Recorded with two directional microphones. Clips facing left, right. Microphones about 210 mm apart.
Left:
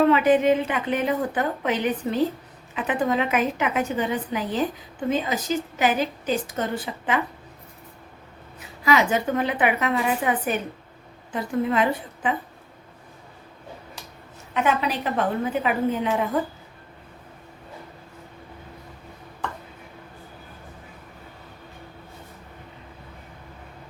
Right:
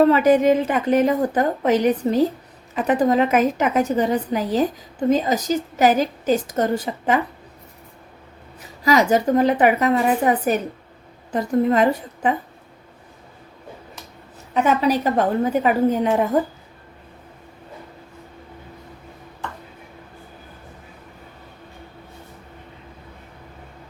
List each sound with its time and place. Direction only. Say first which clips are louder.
0.0 s a woman's voice: right 3 dB; 40° right (ahead or behind)
8.8 s a woman's voice: right 4 dB; 40° right (ahead or behind)
14.5 s a woman's voice: right 5 dB; 40° right (ahead or behind)